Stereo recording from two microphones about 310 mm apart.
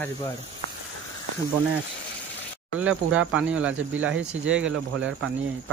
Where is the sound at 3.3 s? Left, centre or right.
Centre.